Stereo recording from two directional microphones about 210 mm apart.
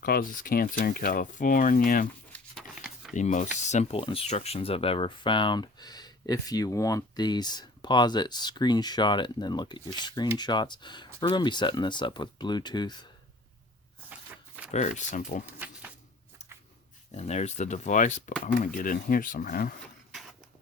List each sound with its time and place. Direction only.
0.0 s speech: 45° left (ahead or behind)
3.2 s speech: 35° left (ahead or behind)
14.1 s a sound: 5° right (ahead or behind)
14.7 s speech: 35° left (ahead or behind)
15.4 s a sound: 10° right (ahead or behind)
17.2 s speech: 30° left (ahead or behind)